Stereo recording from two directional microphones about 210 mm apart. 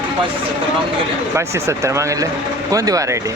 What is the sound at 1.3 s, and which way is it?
Speech, 15° right (ahead or behind).